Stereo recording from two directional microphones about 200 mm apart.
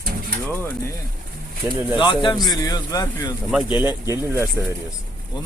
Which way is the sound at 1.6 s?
10° right (ahead or behind).